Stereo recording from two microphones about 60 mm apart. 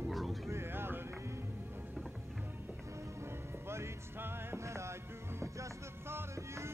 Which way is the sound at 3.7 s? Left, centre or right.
Right.